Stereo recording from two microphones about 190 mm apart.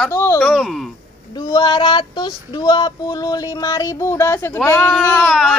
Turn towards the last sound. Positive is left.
turn(degrees=10)  # may be behind; listen again after turning